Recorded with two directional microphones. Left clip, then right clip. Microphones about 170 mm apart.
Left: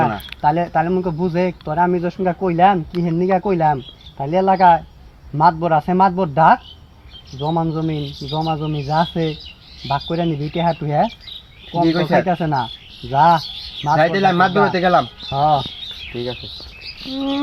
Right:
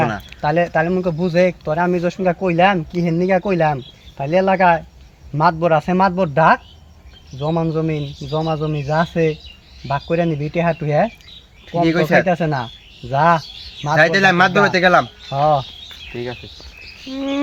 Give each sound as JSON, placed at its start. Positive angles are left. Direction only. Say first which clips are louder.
{"t": 0.4, "sound": "speech", "louder": "even", "side_deg": -45}
{"t": 8.4, "sound": "speech", "louder": "right 1 dB", "side_deg": -40}
{"t": 11.9, "sound": "speech", "louder": "right 2 dB", "side_deg": -15}
{"t": 12.2, "sound": "speech", "louder": "even", "side_deg": -45}
{"t": 14.0, "sound": "speech", "louder": "right 3 dB", "side_deg": -15}
{"t": 15.4, "sound": "speech", "louder": "even", "side_deg": -50}
{"t": 17.1, "sound": "bird", "louder": "even", "side_deg": -20}